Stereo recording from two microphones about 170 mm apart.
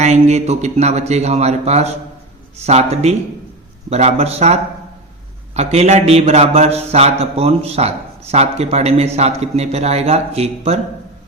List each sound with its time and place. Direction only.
0.0 s a man's voice: 40° right (ahead or behind)